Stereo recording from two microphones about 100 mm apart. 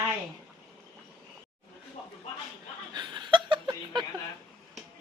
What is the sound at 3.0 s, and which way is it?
Chuckle, 50° right (ahead or behind).